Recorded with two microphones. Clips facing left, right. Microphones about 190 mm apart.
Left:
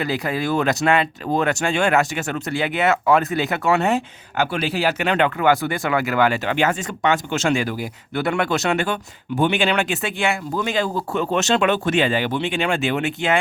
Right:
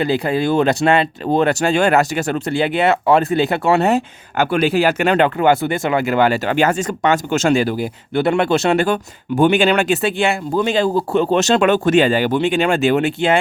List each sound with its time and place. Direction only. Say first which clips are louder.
0.0 s speech: right 6 dB; 30° right (ahead or behind)
4.5 s speech: right 9 dB; 50° right (ahead or behind); by 13.4 s 30° right (ahead or behind)